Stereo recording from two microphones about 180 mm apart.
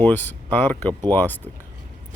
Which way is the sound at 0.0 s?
10° left (ahead or behind).